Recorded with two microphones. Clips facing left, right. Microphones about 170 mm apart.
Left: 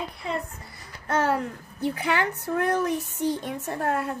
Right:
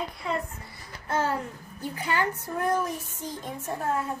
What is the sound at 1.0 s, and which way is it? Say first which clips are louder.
A child's voice: left 3 dB; 75° left (ahead or behind).